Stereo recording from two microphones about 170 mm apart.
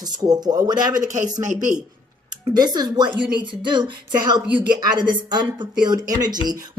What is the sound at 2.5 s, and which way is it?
Speech, 25° right (ahead or behind).